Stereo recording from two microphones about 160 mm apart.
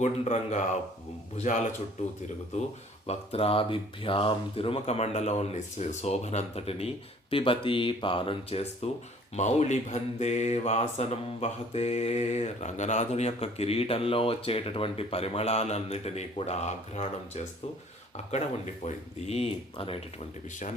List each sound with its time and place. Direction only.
0.0 s speech: 50° left (ahead or behind)